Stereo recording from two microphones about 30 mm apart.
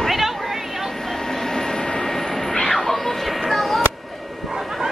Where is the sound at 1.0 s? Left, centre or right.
Centre.